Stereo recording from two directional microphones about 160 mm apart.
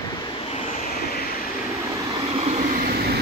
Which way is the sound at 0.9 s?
70° left (ahead or behind).